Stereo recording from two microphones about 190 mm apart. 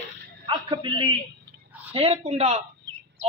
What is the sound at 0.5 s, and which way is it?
A man's voice, 25° right (ahead or behind).